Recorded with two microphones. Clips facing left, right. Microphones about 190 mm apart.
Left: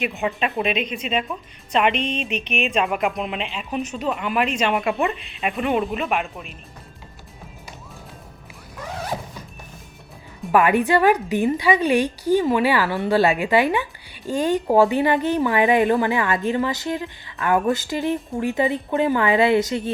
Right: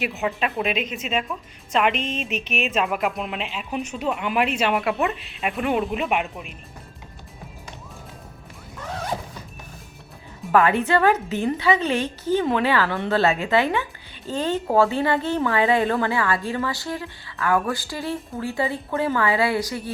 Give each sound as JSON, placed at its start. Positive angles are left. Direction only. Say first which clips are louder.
{"t": 0.0, "sound": "speech", "louder": "left 1 dB", "side_deg": 0}
{"t": 6.0, "sound": "speech", "louder": "even", "side_deg": -15}
{"t": 10.5, "sound": "a woman's voice", "louder": "left 2 dB", "side_deg": 15}